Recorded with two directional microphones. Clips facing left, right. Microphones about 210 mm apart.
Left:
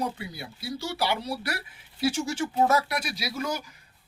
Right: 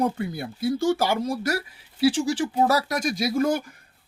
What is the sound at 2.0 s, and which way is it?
Speech, 30° right (ahead or behind).